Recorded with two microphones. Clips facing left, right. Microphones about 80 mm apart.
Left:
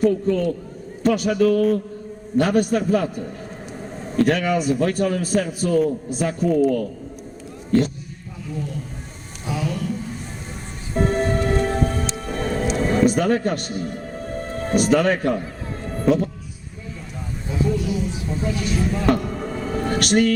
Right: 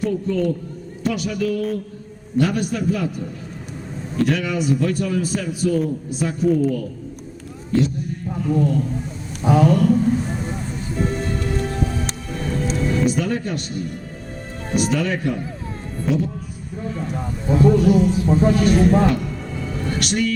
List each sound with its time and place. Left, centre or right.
0.0 s a man's voice: left
4.2 s a man's voice: left
8.4 s speech: right
10.9 s music: left
17.5 s speech: right
19.1 s music: left